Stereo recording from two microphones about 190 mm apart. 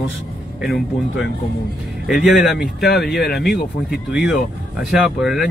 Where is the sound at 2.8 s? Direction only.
60° left (ahead or behind).